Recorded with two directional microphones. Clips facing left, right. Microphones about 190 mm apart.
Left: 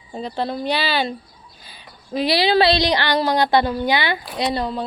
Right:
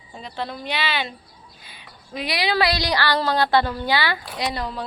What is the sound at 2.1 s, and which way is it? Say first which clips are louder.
Speech: left 6 dB; 30° left (ahead or behind).